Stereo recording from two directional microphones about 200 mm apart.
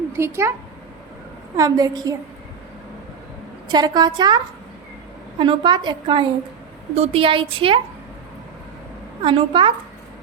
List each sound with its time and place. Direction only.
0.2 s a woman's voice: 15° right (ahead or behind)
1.5 s a woman's voice: 15° right (ahead or behind)
3.7 s a woman's voice: 20° right (ahead or behind)
5.4 s a woman's voice: 25° right (ahead or behind)
9.2 s a woman's voice: 25° right (ahead or behind)